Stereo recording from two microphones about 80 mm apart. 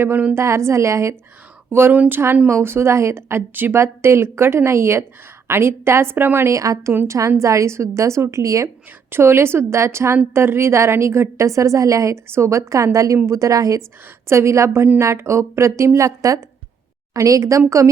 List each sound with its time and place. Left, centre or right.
0.0 s speech: right
0.3 s a woman's voice: right
1.7 s a woman's voice: right
6.6 s a woman's voice: right
9.0 s a woman's voice: right
14.3 s a woman's voice: right